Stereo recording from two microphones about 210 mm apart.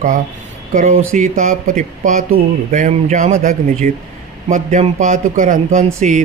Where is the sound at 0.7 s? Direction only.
35° right (ahead or behind).